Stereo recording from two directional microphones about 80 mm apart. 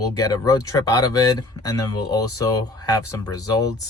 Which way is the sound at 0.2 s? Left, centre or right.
Left.